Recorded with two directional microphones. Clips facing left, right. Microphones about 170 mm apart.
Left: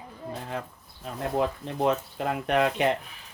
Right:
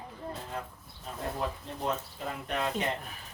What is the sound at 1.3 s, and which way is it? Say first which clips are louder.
Speech: left 8 dB; 75° left (ahead or behind).